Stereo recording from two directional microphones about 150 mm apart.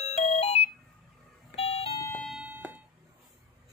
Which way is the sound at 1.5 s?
40° left (ahead or behind).